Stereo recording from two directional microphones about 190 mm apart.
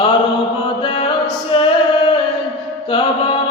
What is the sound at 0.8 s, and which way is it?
Music, 25° left (ahead or behind).